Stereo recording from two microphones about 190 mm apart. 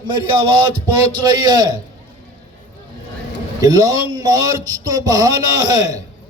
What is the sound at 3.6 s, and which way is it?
A man's voice, 20° right (ahead or behind).